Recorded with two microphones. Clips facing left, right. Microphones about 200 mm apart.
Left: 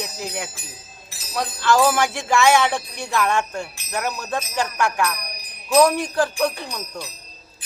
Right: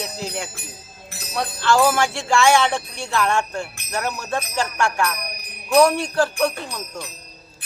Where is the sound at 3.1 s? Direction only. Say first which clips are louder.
Even; 5° left (ahead or behind).